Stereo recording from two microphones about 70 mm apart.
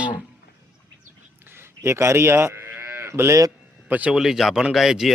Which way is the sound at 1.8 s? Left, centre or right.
Right.